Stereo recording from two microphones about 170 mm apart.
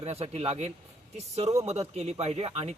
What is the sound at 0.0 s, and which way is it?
A man's voice, 35° right (ahead or behind).